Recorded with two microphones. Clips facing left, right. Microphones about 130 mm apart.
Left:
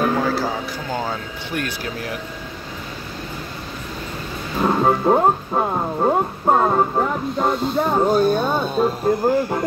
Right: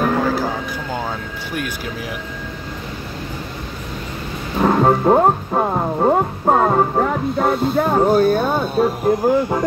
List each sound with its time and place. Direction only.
0.2 s music: 15° right (ahead or behind)
1.5 s speech: 5° right (ahead or behind)
4.6 s speech: 20° right (ahead or behind)